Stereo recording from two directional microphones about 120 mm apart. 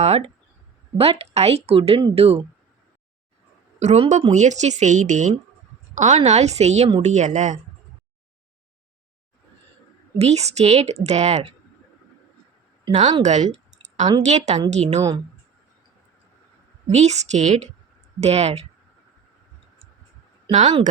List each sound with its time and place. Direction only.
0.0 s speech: 65° right (ahead or behind)
3.8 s a woman's voice: 65° right (ahead or behind)
7.0 s speech: 85° right
10.2 s speech: 60° right (ahead or behind)
12.9 s a woman's voice: 80° right
16.8 s a woman's voice: 70° right (ahead or behind)
18.2 s speech: 65° right (ahead or behind)
20.5 s speech: 90° right